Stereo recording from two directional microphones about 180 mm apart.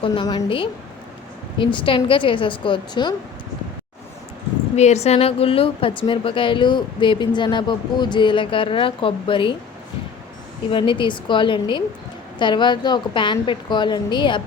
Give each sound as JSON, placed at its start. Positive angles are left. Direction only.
{"t": 0.0, "sound": "a woman's voice", "side_deg": 25}
{"t": 4.8, "sound": "a woman's voice", "side_deg": 40}
{"t": 10.7, "sound": "a woman's voice", "side_deg": 30}